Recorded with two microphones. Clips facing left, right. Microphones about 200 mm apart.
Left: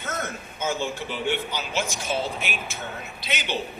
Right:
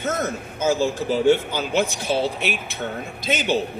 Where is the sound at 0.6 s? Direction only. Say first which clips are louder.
Right 7 dB; 35° right (ahead or behind).